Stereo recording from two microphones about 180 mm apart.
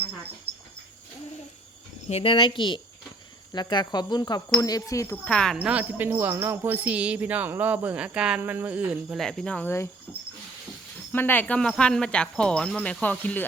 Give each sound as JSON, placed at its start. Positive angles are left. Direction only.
{"t": 2.0, "sound": "speech", "side_deg": 35}
{"t": 5.5, "sound": "speech", "side_deg": -5}